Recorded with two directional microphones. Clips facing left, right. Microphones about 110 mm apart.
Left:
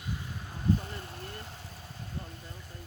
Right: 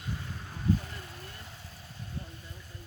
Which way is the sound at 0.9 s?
30° left (ahead or behind).